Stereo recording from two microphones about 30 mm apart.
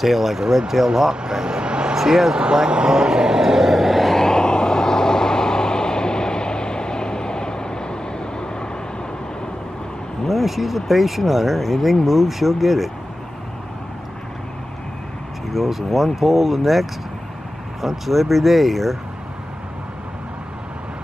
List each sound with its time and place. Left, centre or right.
0.0 s speech: centre
1.2 s vehicle: right
2.0 s speech: centre
2.5 s speech: right
3.7 s a sound: centre
4.2 s vehicle: left
10.2 s speech: centre
15.5 s speech: centre
17.8 s speech: centre